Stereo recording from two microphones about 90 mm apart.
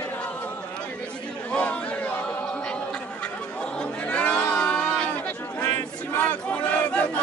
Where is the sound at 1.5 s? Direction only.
15° left (ahead or behind).